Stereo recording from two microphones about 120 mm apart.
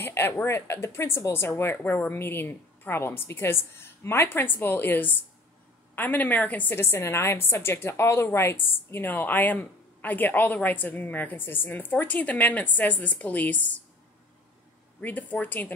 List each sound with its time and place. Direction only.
0.0 s a woman's voice: 20° left (ahead or behind)
15.0 s a woman's voice: 15° left (ahead or behind)